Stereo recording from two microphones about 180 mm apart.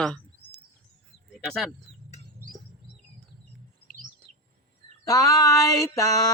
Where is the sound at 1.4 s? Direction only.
5° left (ahead or behind).